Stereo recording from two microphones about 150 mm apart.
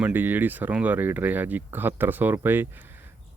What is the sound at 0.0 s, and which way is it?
A man's voice, 10° right (ahead or behind).